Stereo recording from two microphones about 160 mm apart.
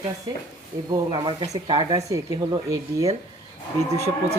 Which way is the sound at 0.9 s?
25° right (ahead or behind).